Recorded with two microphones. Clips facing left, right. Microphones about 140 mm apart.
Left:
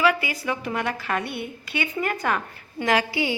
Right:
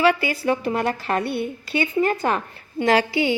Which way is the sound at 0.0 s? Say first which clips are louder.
Right 3 dB; 30° right (ahead or behind).